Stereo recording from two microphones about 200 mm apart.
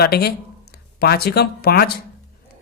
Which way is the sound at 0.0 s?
50° left (ahead or behind).